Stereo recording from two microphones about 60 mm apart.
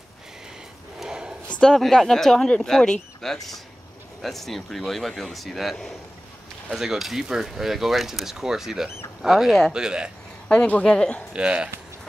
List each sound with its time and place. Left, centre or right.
0.9 s a sound: centre
1.8 s speech: centre
10.5 s a woman's voice: centre
11.3 s speech: centre